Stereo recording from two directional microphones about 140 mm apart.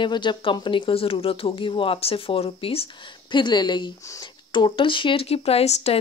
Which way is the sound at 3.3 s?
35° left (ahead or behind).